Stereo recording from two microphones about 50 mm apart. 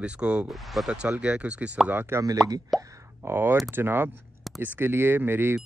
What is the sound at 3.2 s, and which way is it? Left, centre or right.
Speech, right.